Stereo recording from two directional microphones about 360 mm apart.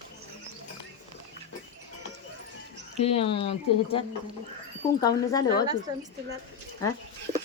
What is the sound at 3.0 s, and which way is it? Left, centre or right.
Speech, centre.